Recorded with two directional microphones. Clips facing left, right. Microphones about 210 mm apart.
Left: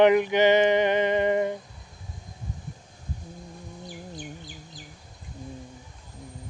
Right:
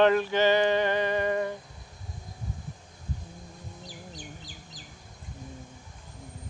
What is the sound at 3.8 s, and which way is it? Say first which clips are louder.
Bird: left 6 dB; 55° left (ahead or behind).